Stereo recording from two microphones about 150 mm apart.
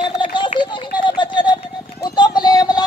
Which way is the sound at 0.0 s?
35° left (ahead or behind).